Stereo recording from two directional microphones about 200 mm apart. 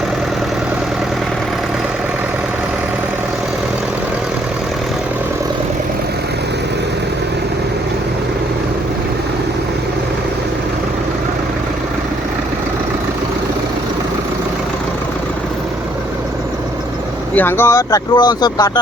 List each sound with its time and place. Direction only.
17.3 s speech: 10° left (ahead or behind)